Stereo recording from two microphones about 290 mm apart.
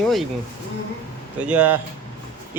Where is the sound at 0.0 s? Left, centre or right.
Centre.